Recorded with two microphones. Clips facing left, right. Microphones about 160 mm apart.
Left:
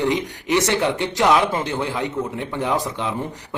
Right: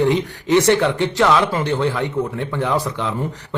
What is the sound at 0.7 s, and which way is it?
A man's voice, 15° left (ahead or behind).